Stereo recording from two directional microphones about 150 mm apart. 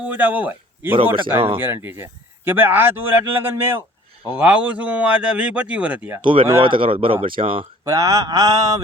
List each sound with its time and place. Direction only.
0.0 s a man's voice: 10° right (ahead or behind)
6.2 s speech: 35° right (ahead or behind)
7.9 s mantra: 20° right (ahead or behind)